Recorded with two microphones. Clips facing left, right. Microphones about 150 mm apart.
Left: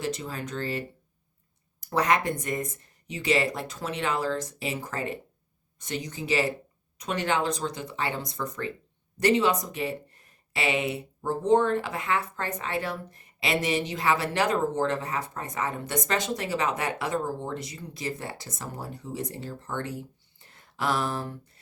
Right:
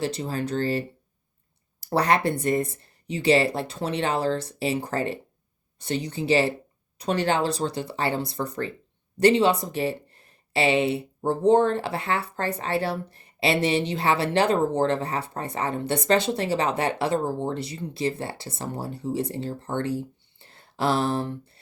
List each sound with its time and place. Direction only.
0.0 s speech: 30° right (ahead or behind)